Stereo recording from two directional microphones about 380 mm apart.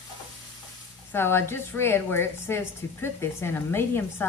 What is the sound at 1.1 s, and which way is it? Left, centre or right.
A woman's voice, centre.